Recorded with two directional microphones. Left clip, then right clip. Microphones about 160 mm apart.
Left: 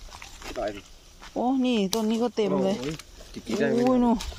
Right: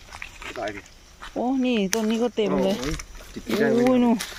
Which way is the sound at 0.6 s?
70° left (ahead or behind).